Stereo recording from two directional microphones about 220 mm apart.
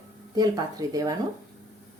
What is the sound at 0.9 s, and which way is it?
Speech, 15° right (ahead or behind).